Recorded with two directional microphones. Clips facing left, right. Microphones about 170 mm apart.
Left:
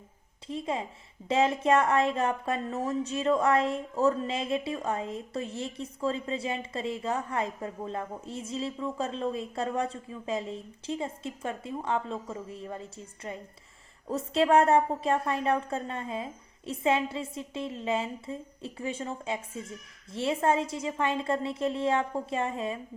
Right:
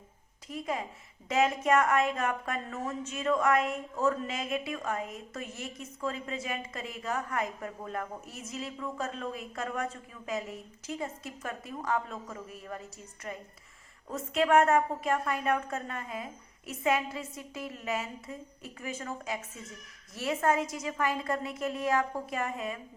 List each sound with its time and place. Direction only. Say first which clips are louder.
0.4 s speech: left 2 dB; 30° left (ahead or behind)